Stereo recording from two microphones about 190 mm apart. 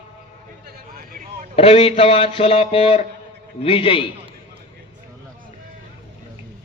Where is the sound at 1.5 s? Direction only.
30° left (ahead or behind).